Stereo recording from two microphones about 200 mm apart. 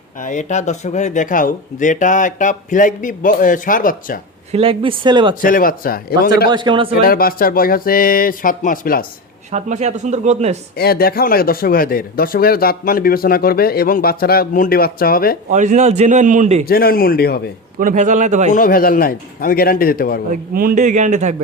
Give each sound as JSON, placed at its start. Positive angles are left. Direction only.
{"t": 0.2, "sound": "speech", "side_deg": 40}
{"t": 4.5, "sound": "speech", "side_deg": -25}
{"t": 5.4, "sound": "speech", "side_deg": 45}
{"t": 6.5, "sound": "speech", "side_deg": -25}
{"t": 7.0, "sound": "speech", "side_deg": 45}
{"t": 9.5, "sound": "a man's voice", "side_deg": -35}
{"t": 10.8, "sound": "speech", "side_deg": 50}
{"t": 15.4, "sound": "a man's voice", "side_deg": -40}
{"t": 16.6, "sound": "speech", "side_deg": 50}
{"t": 17.7, "sound": "a man's voice", "side_deg": -40}
{"t": 18.5, "sound": "speech", "side_deg": 45}
{"t": 20.3, "sound": "a man's voice", "side_deg": -45}